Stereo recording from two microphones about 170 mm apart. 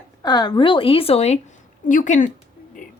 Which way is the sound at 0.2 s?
25° left (ahead or behind).